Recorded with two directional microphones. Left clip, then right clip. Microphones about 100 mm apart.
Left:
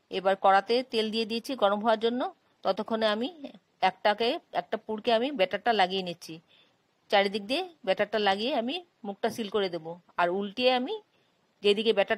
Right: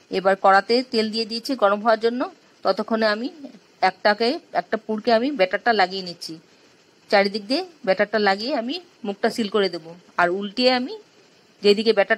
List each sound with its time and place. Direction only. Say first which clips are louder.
0.1 s speech: right 7 dB; 40° left (ahead or behind)
1.7 s speech: right 7 dB; 40° left (ahead or behind)